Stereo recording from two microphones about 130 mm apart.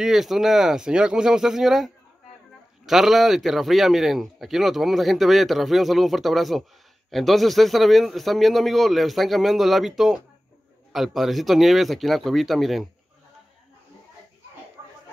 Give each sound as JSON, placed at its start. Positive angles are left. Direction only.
{"t": 0.0, "sound": "a man's voice", "side_deg": -5}